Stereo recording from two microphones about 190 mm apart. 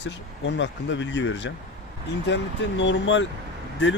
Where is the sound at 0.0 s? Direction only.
70° left (ahead or behind).